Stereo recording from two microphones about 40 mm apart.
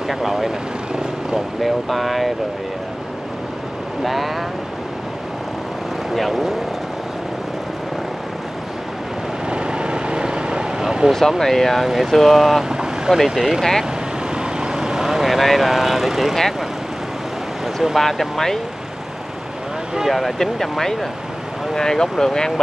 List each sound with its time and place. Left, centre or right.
0.1 s speech: centre
1.6 s speech: centre
4.0 s speech: centre
6.1 s speech: centre
9.5 s vehicle: right
11.1 s speech: centre
12.6 s vehicle: centre
13.4 s speech: centre
14.3 s vehicle: right; by 16.3 s centre
17.9 s speech: centre
20.1 s speech: centre